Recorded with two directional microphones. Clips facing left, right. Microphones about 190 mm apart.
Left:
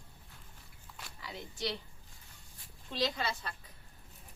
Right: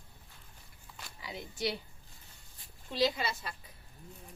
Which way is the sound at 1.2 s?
10° right (ahead or behind).